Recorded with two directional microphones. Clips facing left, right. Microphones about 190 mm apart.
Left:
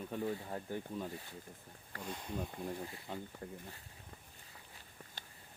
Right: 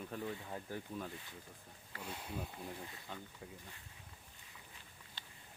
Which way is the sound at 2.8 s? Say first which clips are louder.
Left 5 dB; 30° left (ahead or behind).